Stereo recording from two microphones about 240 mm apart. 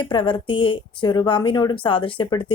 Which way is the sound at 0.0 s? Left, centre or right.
Centre.